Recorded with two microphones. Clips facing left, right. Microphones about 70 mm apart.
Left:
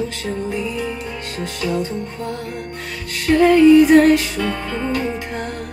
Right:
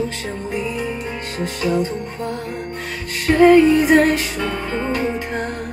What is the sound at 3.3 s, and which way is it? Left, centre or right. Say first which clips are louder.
Music: left 1 dB; right.